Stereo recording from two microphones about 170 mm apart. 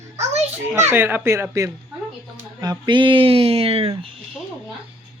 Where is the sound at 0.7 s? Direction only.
15° right (ahead or behind); by 3.9 s 35° right (ahead or behind).